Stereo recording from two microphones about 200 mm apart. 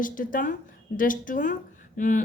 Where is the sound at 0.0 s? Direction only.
40° left (ahead or behind).